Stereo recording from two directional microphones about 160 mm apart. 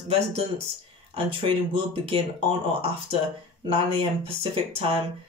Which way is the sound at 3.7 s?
35° right (ahead or behind).